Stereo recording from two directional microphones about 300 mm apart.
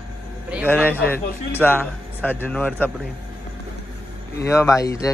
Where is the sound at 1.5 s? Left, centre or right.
Centre.